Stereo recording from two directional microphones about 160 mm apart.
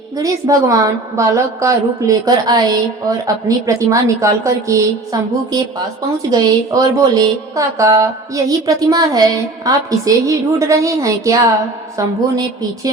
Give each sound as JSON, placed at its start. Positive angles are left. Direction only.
{"t": 0.2, "sound": "a woman's voice", "side_deg": -20}